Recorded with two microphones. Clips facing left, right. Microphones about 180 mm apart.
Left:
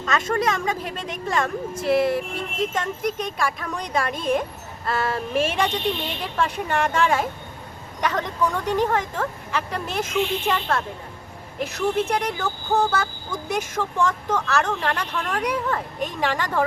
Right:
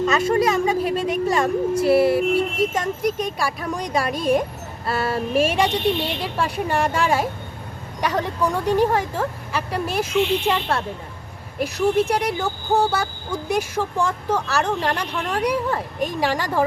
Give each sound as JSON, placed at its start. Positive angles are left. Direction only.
{"t": 0.0, "sound": "speech", "side_deg": -10}